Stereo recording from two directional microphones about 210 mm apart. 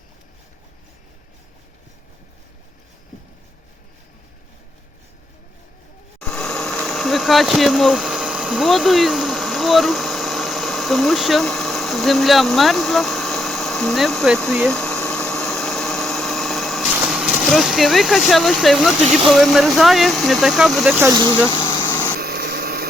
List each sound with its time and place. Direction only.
6.1 s a sound: centre (ahead or behind)
21.2 s speech: 10° left (ahead or behind)
21.5 s vehicle: 20° left (ahead or behind)
21.8 s light engine: 10° left (ahead or behind)
22.2 s light engine: 50° right (ahead or behind)